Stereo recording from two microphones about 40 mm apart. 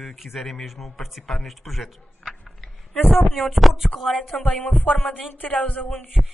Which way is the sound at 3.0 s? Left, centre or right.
Left.